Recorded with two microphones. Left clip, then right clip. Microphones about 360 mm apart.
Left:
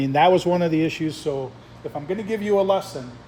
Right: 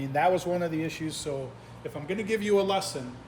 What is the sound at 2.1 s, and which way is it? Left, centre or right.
Speech, centre.